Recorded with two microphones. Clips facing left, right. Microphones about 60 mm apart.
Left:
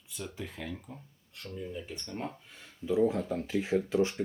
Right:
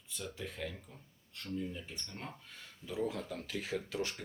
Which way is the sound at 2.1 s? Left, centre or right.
Centre.